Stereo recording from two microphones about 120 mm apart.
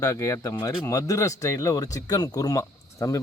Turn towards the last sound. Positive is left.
turn(degrees=25)  # may be behind; listen again after turning